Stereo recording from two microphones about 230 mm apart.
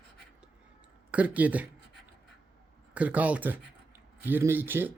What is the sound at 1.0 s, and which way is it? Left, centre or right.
Speech, centre.